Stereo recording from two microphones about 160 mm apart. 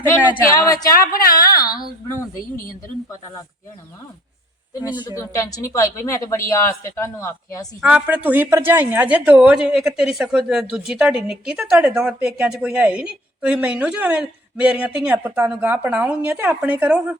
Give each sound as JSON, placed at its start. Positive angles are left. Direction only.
{"t": 0.5, "sound": "a woman's voice", "side_deg": 20}
{"t": 1.3, "sound": "a sound", "side_deg": 25}
{"t": 4.9, "sound": "a woman's voice", "side_deg": 30}
{"t": 7.8, "sound": "speech", "side_deg": -5}